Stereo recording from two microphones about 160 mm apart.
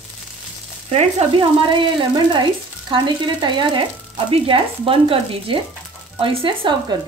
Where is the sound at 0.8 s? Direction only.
40° right (ahead or behind).